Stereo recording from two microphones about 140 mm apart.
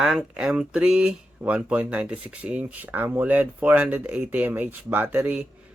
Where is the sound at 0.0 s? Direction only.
5° right (ahead or behind).